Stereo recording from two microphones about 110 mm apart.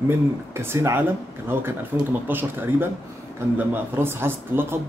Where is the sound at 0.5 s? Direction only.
25° right (ahead or behind).